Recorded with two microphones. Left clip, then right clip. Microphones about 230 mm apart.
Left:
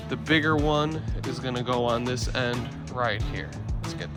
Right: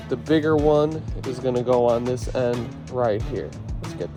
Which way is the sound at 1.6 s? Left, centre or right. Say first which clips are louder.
Right 7 dB; centre.